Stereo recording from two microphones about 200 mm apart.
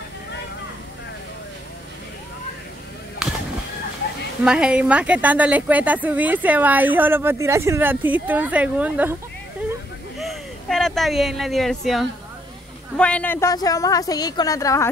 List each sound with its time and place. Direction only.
3.2 s fowl: 5° right (ahead or behind)
4.5 s a woman's voice: 5° right (ahead or behind)
10.1 s a woman's voice: centre (ahead or behind)